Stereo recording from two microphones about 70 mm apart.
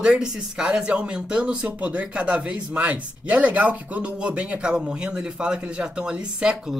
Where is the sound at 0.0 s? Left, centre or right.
Centre.